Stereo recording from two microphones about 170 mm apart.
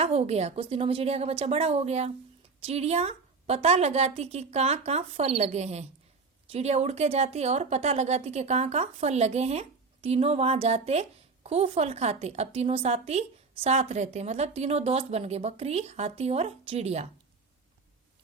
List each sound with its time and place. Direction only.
0.0 s a woman's voice: 40° right (ahead or behind)